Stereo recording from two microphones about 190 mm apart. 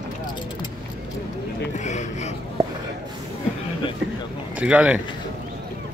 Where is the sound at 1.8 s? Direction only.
40° left (ahead or behind).